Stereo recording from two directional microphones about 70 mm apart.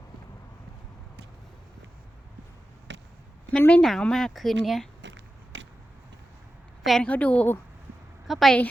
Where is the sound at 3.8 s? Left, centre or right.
Centre.